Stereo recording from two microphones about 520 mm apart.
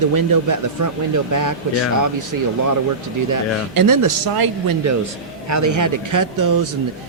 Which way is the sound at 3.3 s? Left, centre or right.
Right.